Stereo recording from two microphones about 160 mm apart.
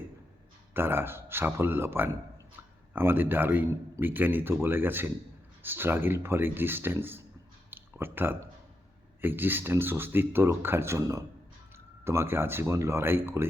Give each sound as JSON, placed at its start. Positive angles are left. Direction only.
{"t": 0.7, "sound": "a man's voice", "side_deg": -15}
{"t": 7.7, "sound": "a sound", "side_deg": -15}
{"t": 9.2, "sound": "a man's voice", "side_deg": -10}